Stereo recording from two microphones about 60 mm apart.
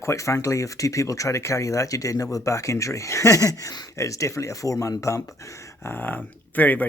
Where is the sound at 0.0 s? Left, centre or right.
Left.